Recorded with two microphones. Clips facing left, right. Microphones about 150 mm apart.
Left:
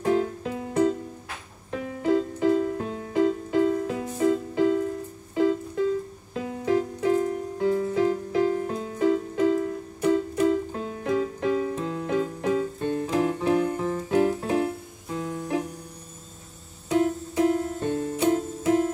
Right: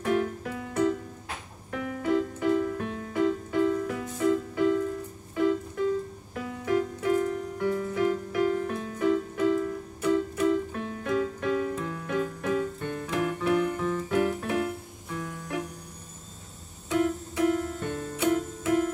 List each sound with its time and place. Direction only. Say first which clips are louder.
0.0 s music: left 3 dB; 25° left (ahead or behind)
16.9 s music: left 3 dB; 25° left (ahead or behind)